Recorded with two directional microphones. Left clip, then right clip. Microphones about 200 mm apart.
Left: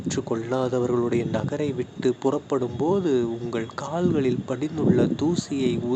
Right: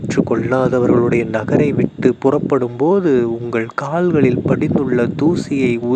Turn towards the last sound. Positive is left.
turn(degrees=-30)  # may be behind; listen again after turning